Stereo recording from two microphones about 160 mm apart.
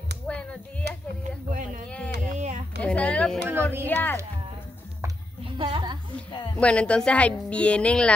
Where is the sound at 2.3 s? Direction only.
50° right (ahead or behind).